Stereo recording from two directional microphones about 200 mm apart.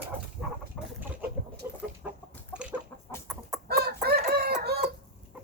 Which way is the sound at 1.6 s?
10° right (ahead or behind).